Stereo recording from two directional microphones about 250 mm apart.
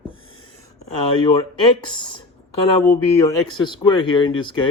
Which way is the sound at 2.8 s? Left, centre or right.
Centre.